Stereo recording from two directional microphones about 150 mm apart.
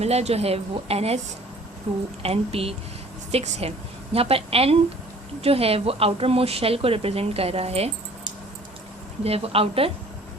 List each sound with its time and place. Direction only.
0.0 s a woman's voice: 45° right (ahead or behind)
9.2 s speech: 40° right (ahead or behind)